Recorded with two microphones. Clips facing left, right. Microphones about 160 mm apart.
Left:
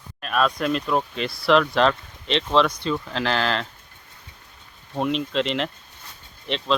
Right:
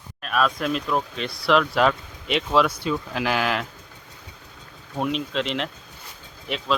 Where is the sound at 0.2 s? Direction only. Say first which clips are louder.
Left 1 dB; centre (ahead or behind).